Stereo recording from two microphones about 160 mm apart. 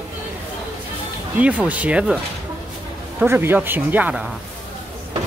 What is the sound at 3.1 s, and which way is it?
Speech, 10° right (ahead or behind).